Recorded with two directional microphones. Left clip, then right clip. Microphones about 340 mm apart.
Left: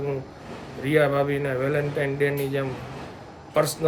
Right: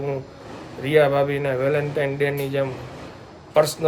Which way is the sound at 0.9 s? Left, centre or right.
Centre.